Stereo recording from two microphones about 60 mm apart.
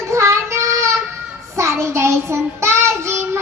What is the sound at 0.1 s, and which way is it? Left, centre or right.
Child singing, right.